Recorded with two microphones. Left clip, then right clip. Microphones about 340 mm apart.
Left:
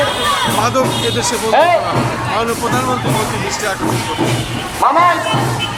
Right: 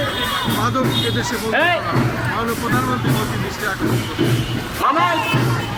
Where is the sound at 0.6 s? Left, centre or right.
Centre.